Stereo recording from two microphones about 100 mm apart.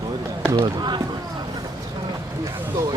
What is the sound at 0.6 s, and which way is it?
Speech, 50° right (ahead or behind).